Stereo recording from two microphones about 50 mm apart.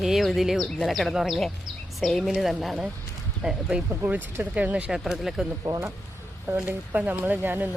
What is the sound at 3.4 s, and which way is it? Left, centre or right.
Speech, right.